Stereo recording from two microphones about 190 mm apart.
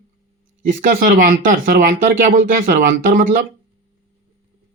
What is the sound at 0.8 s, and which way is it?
Speech, 50° right (ahead or behind).